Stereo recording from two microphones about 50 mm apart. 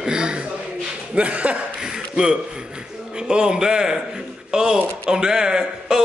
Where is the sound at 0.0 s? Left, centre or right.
Centre.